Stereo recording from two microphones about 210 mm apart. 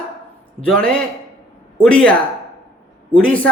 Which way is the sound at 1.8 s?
5° left (ahead or behind).